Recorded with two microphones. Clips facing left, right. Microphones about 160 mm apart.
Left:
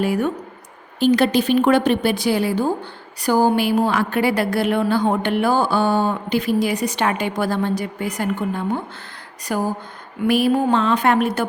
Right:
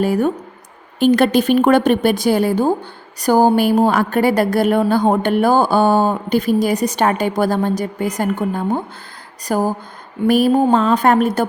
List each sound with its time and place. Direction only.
0.0 s speech: 40° right (ahead or behind)
0.9 s speech: 55° right (ahead or behind)